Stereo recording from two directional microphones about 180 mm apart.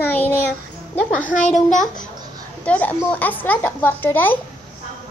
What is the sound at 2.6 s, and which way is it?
A child's voice, 10° left (ahead or behind).